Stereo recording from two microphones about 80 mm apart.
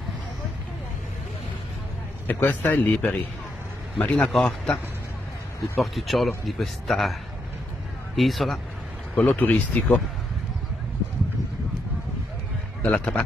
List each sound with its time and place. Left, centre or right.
2.2 s speech: left
4.3 s speech: centre
5.8 s speech: centre
8.2 s speech: centre
9.1 s speech: left
12.8 s a man's voice: centre